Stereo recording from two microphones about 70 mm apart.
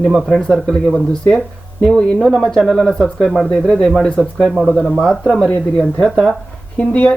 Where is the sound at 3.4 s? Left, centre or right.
Centre.